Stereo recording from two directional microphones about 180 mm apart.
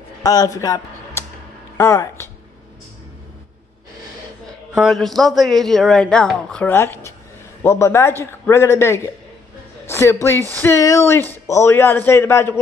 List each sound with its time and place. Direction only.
0.2 s a man's voice: 20° left (ahead or behind)
4.7 s a man's voice: centre (ahead or behind)
9.8 s a sound: 15° left (ahead or behind)
10.6 s a man's voice: 15° left (ahead or behind)